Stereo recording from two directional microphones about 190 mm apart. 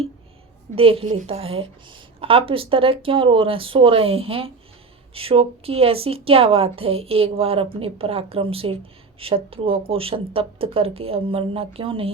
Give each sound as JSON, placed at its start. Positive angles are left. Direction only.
{"t": 0.8, "sound": "a woman's voice", "side_deg": -30}